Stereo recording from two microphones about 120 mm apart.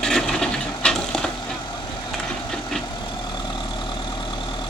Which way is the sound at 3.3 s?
40° left (ahead or behind).